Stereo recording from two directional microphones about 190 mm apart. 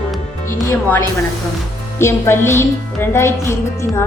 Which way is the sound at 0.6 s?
10° left (ahead or behind).